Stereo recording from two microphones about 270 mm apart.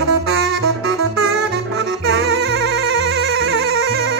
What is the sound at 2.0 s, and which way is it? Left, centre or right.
Music, right.